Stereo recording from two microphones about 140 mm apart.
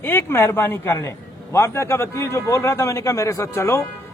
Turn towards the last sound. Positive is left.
turn(degrees=20)  # may be behind; listen again after turning